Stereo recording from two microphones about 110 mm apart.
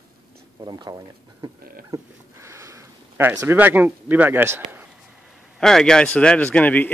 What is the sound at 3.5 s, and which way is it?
A man's voice, 15° right (ahead or behind).